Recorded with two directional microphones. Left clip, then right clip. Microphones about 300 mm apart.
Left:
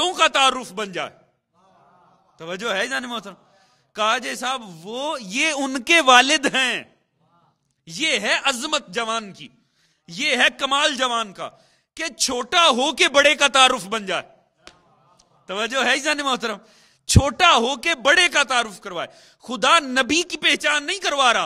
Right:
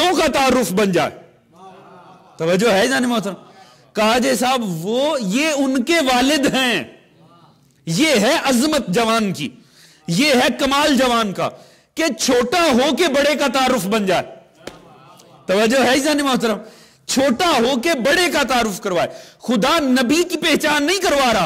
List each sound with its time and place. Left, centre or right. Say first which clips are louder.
0.1 s a man's voice: right 2 dB; right
2.3 s a man's voice: right 10 dB; right
4.8 s a man's voice: right 8 dB; centre
6.6 s a man's voice: right 4 dB; right
8.9 s a man's voice: right 8 dB; right
15.4 s a man's voice: right 10 dB; right
15.8 s a man's voice: right 4 dB; centre
20.6 s a man's voice: right 5 dB; right
21.2 s a man's voice: left 2 dB; centre